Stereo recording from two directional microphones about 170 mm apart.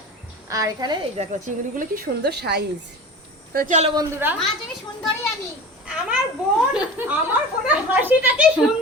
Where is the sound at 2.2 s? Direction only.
80° right.